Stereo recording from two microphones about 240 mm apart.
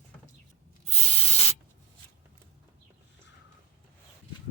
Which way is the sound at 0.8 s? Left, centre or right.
Left.